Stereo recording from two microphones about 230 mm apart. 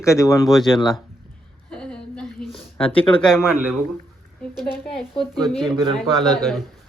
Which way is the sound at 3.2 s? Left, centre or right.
Centre.